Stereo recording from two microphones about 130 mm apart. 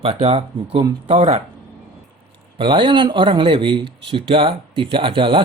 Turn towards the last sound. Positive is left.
turn(degrees=-40)  # may be behind; listen again after turning